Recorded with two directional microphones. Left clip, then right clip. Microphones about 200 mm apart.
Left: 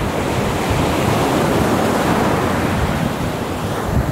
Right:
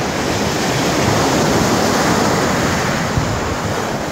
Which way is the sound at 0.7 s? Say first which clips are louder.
Right 2 dB; 45° right (ahead or behind).